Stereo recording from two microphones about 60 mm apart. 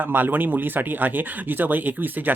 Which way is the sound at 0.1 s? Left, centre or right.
Right.